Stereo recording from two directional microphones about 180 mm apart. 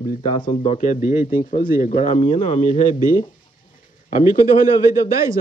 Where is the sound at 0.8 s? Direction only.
50° left (ahead or behind).